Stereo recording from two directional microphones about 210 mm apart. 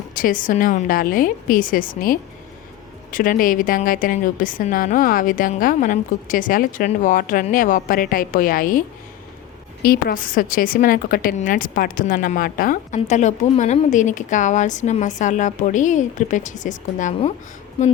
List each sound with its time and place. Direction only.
0.1 s a woman's voice: 40° left (ahead or behind)
9.8 s a woman's voice: 45° left (ahead or behind)